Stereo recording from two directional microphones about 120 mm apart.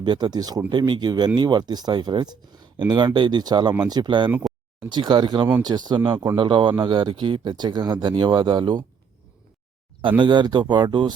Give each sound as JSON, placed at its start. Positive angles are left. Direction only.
{"t": 0.0, "sound": "speech", "side_deg": -40}
{"t": 10.2, "sound": "speech", "side_deg": -40}